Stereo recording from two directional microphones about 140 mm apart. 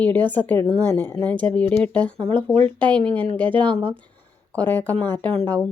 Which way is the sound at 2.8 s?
35° right (ahead or behind).